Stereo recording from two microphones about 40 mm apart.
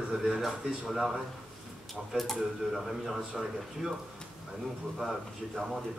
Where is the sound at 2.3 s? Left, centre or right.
Centre.